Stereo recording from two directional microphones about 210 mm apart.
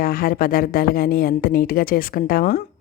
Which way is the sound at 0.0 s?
45° left (ahead or behind).